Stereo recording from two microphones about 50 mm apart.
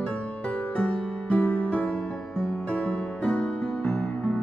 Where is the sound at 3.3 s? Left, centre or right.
Centre.